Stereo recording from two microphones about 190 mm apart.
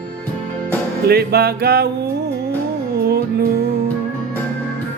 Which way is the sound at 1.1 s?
55° right (ahead or behind).